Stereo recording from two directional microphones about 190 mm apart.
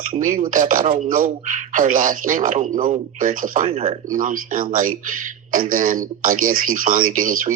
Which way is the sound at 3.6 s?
30° right (ahead or behind).